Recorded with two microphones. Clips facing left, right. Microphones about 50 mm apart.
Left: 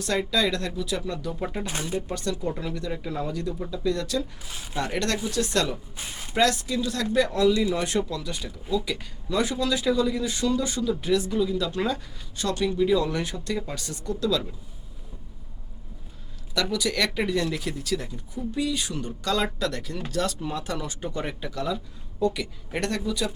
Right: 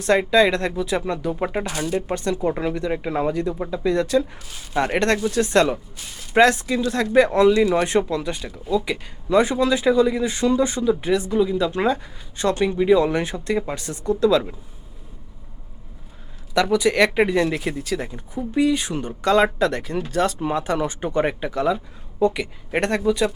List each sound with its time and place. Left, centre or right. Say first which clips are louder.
0.0 s speech: right 8 dB; right
16.6 s speech: right 8 dB; right